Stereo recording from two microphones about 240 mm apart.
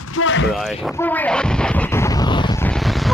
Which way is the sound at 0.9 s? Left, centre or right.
Centre.